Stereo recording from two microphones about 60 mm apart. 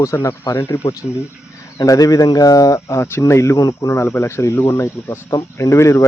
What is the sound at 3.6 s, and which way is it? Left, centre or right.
Speech, left.